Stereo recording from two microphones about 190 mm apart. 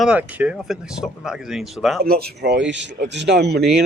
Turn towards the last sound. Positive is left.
turn(degrees=-60)  # may be behind; listen again after turning